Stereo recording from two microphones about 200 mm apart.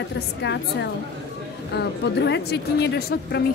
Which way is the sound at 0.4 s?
60° left (ahead or behind).